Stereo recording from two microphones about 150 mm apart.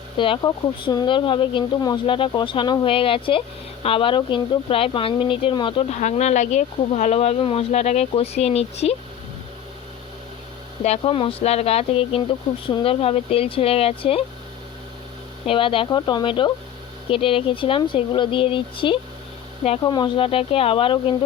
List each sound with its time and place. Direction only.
0.4 s speech: 30° left (ahead or behind)
5.9 s speech: 50° left (ahead or behind)
10.8 s speech: 40° left (ahead or behind)
15.4 s speech: 35° left (ahead or behind)